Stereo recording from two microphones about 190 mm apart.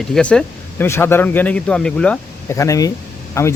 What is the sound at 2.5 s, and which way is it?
Speech, 15° left (ahead or behind).